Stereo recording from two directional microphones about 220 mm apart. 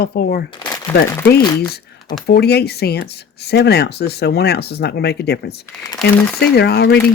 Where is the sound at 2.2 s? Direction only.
50° left (ahead or behind).